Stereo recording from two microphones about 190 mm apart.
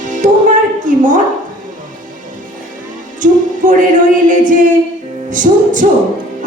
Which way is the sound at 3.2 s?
45° right (ahead or behind).